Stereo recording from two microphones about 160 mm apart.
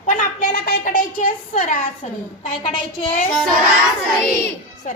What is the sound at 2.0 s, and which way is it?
Speech, 45° left (ahead or behind).